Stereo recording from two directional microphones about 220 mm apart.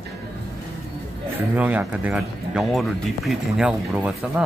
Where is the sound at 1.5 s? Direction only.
5° right (ahead or behind).